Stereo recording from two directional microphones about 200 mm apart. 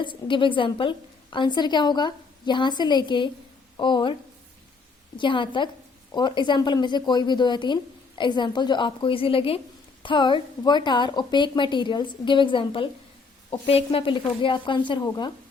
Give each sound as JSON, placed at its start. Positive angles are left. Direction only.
{"t": 0.0, "sound": "speech", "side_deg": 25}
{"t": 5.1, "sound": "speech", "side_deg": 25}